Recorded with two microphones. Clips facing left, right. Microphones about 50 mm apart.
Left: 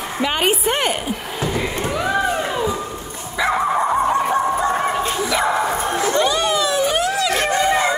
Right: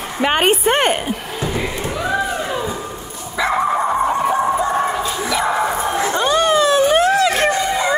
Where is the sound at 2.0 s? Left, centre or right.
Centre.